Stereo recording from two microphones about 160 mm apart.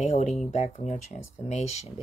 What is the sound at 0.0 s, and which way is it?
Speech, 45° left (ahead or behind).